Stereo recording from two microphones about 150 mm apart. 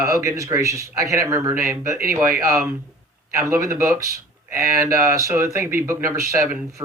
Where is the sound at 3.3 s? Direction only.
20° right (ahead or behind).